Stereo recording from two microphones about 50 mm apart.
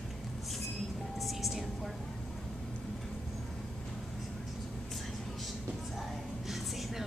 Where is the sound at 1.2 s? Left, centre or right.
Centre.